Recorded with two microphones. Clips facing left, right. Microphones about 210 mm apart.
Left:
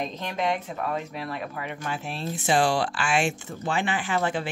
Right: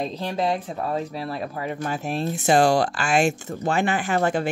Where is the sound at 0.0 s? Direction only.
35° right (ahead or behind).